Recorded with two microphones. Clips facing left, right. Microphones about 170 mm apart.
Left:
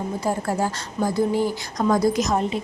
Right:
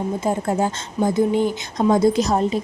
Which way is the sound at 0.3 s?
20° right (ahead or behind).